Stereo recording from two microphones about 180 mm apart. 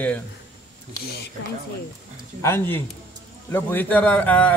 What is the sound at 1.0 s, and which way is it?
Speech, 60° left (ahead or behind).